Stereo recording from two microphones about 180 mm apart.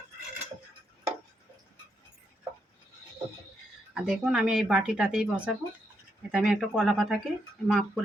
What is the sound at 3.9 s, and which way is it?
Speech, 5° right (ahead or behind).